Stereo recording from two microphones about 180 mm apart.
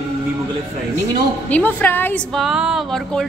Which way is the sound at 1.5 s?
10° left (ahead or behind).